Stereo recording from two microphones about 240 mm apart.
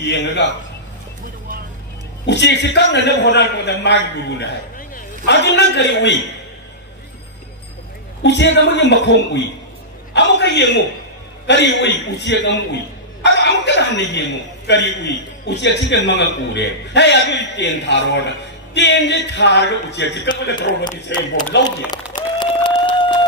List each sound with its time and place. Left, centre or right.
0.0 s a man's voice: left
2.2 s a man's voice: left
8.2 s a man's voice: left
21.5 s speech: left
22.1 s applause: centre